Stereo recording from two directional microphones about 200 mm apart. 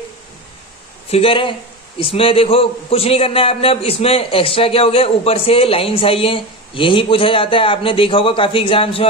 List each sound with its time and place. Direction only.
1.1 s a man's voice: 25° left (ahead or behind)